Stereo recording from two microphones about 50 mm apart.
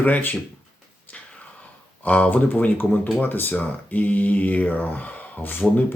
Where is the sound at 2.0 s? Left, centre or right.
Left.